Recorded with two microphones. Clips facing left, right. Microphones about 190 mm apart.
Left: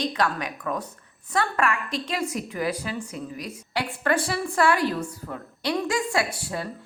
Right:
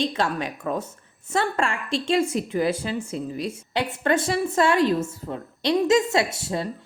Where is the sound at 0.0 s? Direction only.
25° right (ahead or behind).